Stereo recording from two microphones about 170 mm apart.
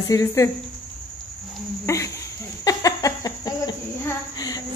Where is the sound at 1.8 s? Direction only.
15° left (ahead or behind).